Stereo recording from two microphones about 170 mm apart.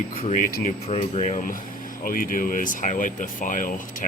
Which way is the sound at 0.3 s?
45° left (ahead or behind).